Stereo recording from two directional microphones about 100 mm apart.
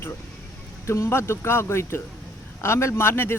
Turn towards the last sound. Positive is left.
turn(degrees=25)  # may be behind; listen again after turning